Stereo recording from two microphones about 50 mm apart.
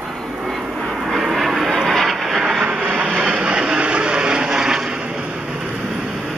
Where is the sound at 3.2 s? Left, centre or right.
Right.